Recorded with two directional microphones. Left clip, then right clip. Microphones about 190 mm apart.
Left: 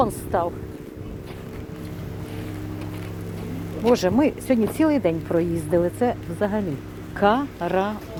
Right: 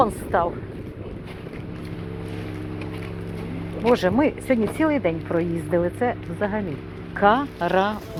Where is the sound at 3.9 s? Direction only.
30° left (ahead or behind).